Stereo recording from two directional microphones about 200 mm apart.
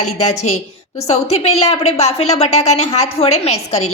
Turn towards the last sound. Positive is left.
turn(degrees=35)  # may be behind; listen again after turning